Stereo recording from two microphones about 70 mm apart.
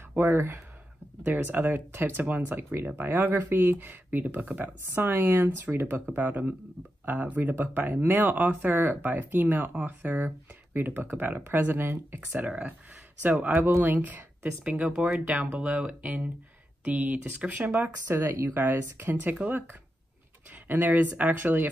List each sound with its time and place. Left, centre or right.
0.2 s speech: right
1.2 s speech: right
7.5 s speech: right
12.4 s speech: centre
18.1 s speech: right